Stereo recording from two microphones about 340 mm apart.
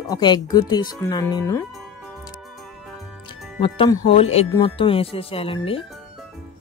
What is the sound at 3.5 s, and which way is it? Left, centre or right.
Speech, centre.